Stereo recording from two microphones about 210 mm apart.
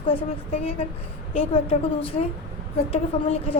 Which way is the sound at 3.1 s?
30° left (ahead or behind).